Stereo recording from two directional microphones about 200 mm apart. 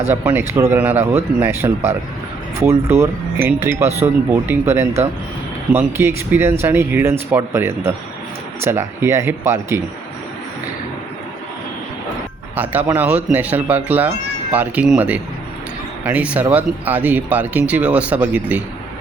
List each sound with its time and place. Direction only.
0.1 s speech: 10° right (ahead or behind)
12.5 s speech: 10° right (ahead or behind)